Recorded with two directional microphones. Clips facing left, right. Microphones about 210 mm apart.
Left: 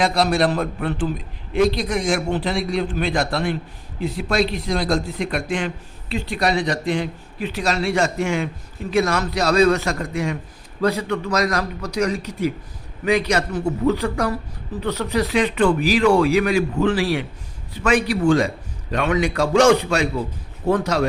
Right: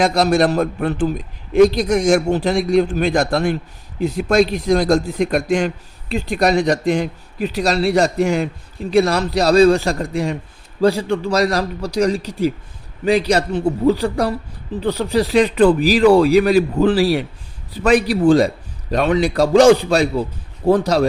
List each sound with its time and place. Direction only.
0.0 s a man's voice: 45° right (ahead or behind)